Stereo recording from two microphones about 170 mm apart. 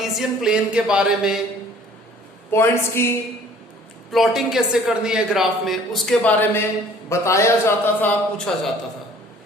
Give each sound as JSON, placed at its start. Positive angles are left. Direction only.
{"t": 0.0, "sound": "a woman's voice", "side_deg": 0}
{"t": 2.5, "sound": "a man's voice", "side_deg": 15}
{"t": 4.1, "sound": "a woman's voice", "side_deg": 0}
{"t": 8.4, "sound": "a woman's voice", "side_deg": 5}